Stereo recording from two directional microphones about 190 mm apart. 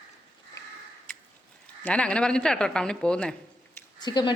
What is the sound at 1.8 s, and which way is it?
Speech, 5° left (ahead or behind).